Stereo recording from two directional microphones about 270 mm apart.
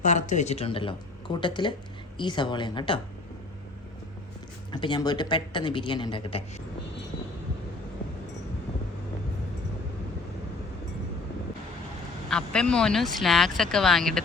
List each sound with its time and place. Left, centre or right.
0.0 s speech: left
4.7 s speech: centre
12.3 s speech: centre